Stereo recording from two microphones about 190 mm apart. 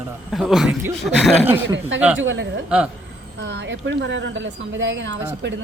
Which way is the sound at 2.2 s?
90° right.